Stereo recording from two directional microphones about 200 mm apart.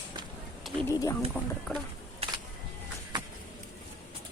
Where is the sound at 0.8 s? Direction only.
15° left (ahead or behind).